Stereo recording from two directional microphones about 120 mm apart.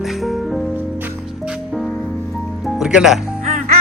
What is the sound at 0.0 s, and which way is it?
Music, centre (ahead or behind).